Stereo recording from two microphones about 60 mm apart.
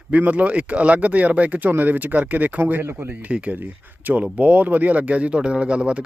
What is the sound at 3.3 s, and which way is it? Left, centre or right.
Speech, right.